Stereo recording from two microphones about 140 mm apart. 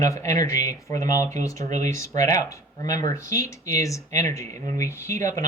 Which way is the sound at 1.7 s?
60° right (ahead or behind).